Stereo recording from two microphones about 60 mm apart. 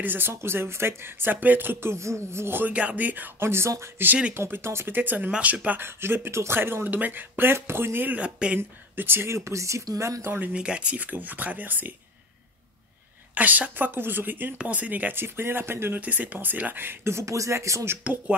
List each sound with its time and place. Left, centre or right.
0.0 s speech: right
2.7 s speech: right
3.4 s speech: right
4.1 s speech: right
4.4 s speech: right
5.8 s speech: right
8.2 s speech: centre
8.5 s speech: right
10.5 s speech: centre
13.3 s speech: right
15.2 s speech: right
16.0 s speech: right
18.1 s speech: right